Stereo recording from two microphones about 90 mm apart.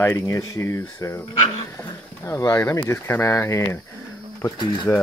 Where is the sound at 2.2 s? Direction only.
35° left (ahead or behind).